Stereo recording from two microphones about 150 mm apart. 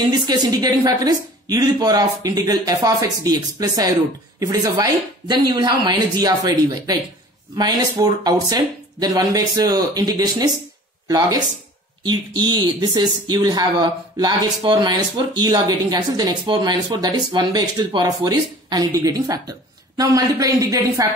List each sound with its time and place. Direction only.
0.1 s speech: 25° right (ahead or behind)